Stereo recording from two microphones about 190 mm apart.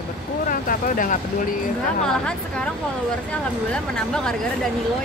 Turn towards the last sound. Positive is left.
turn(degrees=5)  # may be behind; listen again after turning